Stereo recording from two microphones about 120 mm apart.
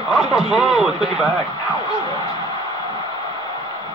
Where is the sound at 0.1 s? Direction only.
Centre (ahead or behind).